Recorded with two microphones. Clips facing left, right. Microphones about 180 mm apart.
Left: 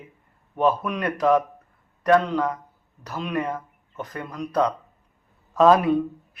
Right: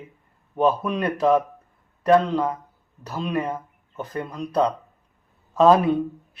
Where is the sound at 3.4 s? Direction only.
10° right (ahead or behind).